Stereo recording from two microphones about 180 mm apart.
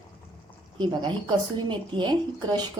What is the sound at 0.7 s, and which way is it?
A woman's voice, 25° right (ahead or behind).